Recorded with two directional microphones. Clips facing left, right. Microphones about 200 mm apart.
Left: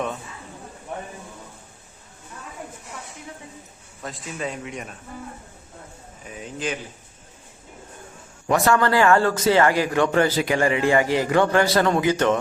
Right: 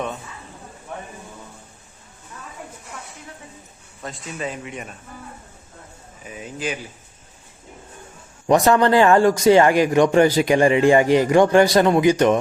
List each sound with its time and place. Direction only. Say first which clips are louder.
4.0 s speech: right 1 dB; centre (ahead or behind)
6.2 s speech: right 1 dB; 5° right (ahead or behind)
8.4 s a man's voice: right 4 dB; 20° right (ahead or behind)